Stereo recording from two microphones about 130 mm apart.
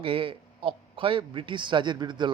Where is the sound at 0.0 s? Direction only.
45° right (ahead or behind).